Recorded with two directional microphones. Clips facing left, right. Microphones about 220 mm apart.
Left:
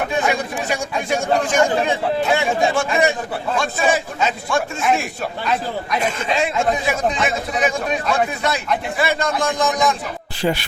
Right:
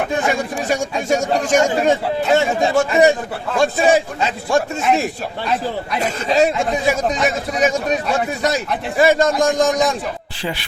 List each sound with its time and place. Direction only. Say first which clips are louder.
1.1 s a man's voice: right 2 dB; 45° right (ahead or behind)
6.2 s speech: right 6 dB; 40° right (ahead or behind)